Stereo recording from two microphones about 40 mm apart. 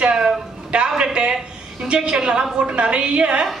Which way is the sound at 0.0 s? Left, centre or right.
Right.